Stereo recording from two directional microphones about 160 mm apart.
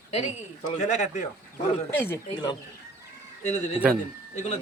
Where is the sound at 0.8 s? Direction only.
50° left (ahead or behind).